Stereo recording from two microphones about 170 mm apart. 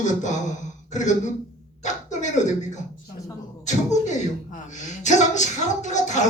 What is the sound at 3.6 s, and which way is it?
A man's voice, 45° left (ahead or behind).